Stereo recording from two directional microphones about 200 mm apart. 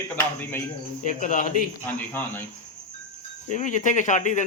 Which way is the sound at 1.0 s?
40° left (ahead or behind).